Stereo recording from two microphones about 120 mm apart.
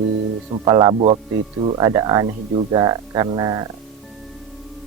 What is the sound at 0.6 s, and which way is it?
Speech, 35° right (ahead or behind).